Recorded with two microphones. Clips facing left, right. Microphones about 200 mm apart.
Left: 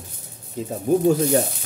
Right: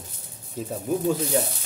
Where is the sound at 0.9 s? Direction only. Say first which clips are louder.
Left 7 dB; 45° left (ahead or behind).